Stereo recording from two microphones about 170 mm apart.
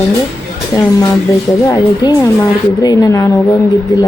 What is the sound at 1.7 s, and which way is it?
Speech, 25° left (ahead or behind).